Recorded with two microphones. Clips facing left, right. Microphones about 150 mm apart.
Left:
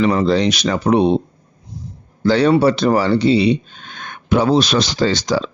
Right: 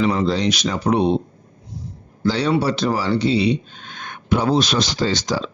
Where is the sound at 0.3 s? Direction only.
65° left (ahead or behind).